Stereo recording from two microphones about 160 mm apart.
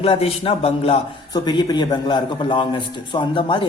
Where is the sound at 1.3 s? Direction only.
25° left (ahead or behind).